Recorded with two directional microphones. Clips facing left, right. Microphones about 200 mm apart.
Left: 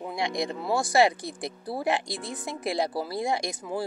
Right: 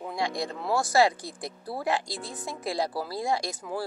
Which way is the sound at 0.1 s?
20° left (ahead or behind).